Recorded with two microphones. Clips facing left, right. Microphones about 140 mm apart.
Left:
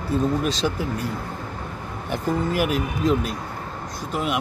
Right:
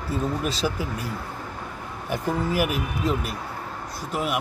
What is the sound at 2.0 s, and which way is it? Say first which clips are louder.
Speech: left 2 dB; 5° right (ahead or behind).